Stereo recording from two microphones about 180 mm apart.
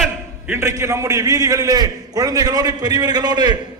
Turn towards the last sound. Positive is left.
turn(degrees=-25)  # may be behind; listen again after turning